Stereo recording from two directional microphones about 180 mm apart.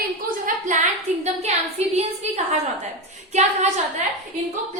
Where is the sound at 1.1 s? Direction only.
40° right (ahead or behind).